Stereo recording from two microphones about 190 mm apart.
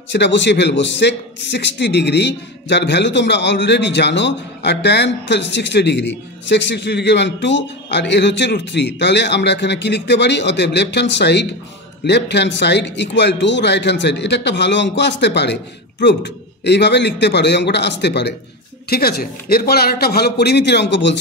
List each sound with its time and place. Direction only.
0.1 s a man's voice: 65° left (ahead or behind)